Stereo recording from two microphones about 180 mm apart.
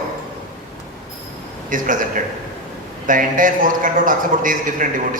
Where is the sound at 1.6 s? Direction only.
45° right (ahead or behind).